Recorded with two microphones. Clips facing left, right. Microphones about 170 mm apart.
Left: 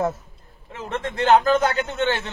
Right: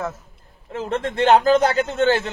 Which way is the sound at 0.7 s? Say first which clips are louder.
Right 4 dB; 35° right (ahead or behind).